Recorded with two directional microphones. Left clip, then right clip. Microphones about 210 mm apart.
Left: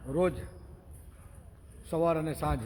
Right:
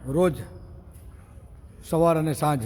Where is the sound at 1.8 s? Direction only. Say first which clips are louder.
Right 7 dB; 15° right (ahead or behind).